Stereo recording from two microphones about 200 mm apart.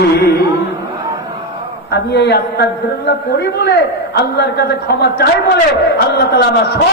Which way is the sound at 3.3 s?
55° left (ahead or behind).